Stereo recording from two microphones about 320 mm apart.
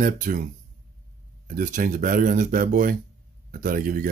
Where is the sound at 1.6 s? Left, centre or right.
Right.